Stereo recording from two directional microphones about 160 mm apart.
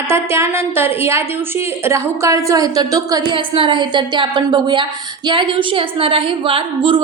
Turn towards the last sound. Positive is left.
turn(degrees=-35)  # may be behind; listen again after turning